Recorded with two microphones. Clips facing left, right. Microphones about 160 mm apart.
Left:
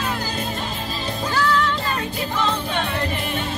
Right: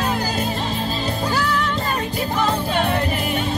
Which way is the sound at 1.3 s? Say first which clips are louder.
Left 4 dB; 10° right (ahead or behind).